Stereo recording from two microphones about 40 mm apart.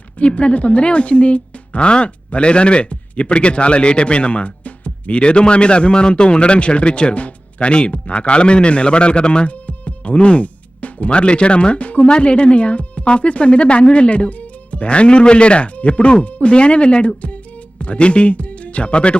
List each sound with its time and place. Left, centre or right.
0.2 s speech: left
9.5 s speech: left